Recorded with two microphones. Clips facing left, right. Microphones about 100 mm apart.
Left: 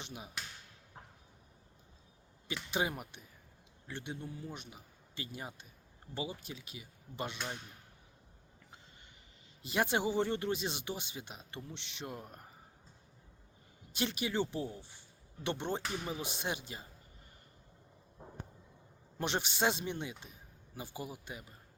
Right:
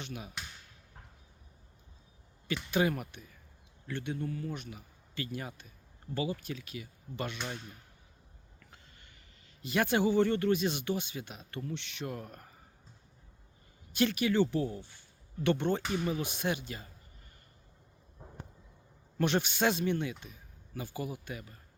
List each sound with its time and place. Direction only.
0.0 s speech: 25° left (ahead or behind)
2.6 s speech: 20° left (ahead or behind)
9.6 s speech: 20° left (ahead or behind)
13.9 s speech: 25° left (ahead or behind)
19.2 s speech: 25° left (ahead or behind)